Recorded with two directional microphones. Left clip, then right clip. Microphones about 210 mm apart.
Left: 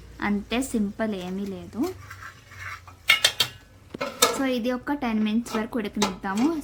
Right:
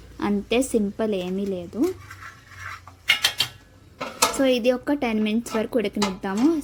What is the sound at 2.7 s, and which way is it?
Cutlery, 10° right (ahead or behind).